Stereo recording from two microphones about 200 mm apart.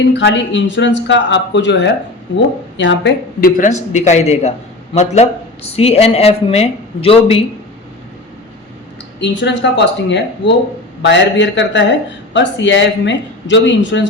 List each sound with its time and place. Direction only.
0.1 s a woman's voice: 60° left (ahead or behind)
3.9 s speech: 35° left (ahead or behind)
9.2 s speech: 60° left (ahead or behind)